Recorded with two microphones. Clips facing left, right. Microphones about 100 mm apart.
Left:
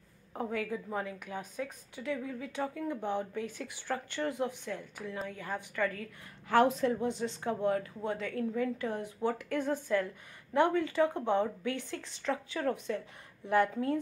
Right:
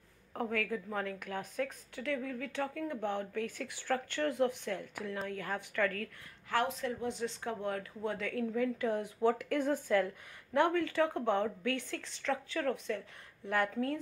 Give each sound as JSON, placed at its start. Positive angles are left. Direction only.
{"t": 0.3, "sound": "a woman's voice", "side_deg": 10}
{"t": 6.5, "sound": "a woman's voice", "side_deg": 25}
{"t": 7.2, "sound": "a woman's voice", "side_deg": 5}